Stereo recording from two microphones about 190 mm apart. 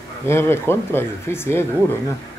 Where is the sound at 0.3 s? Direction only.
15° left (ahead or behind).